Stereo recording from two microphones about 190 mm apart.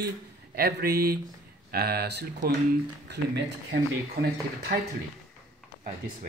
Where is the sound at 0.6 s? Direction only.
55° right (ahead or behind).